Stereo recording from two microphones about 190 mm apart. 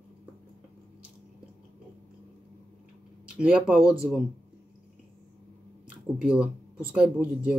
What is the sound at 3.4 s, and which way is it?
Speech, 5° right (ahead or behind).